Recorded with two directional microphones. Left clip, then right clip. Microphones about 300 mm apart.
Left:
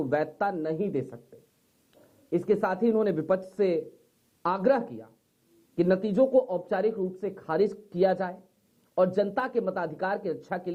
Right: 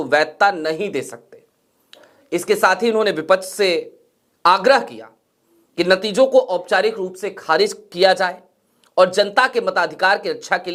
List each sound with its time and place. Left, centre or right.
0.1 s speech: centre
6.2 s speech: right
6.7 s speech: centre